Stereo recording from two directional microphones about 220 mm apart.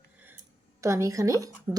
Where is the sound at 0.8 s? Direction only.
15° right (ahead or behind).